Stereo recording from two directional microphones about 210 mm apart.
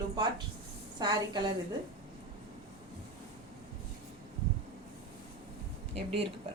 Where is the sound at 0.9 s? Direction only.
20° right (ahead or behind).